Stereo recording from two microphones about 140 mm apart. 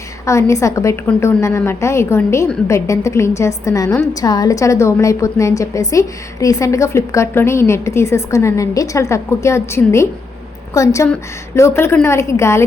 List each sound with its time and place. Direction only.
0.3 s a woman's voice: 20° left (ahead or behind)